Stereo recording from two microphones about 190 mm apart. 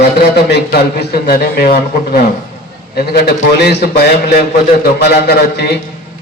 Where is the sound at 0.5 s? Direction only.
60° left (ahead or behind).